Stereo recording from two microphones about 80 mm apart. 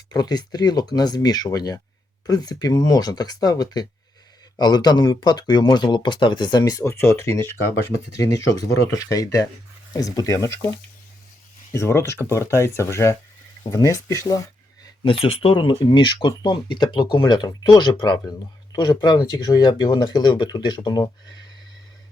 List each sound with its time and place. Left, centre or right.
0.1 s speech: left
7.1 s speech: left
8.1 s speech: left
11.7 s speech: left
15.0 s speech: left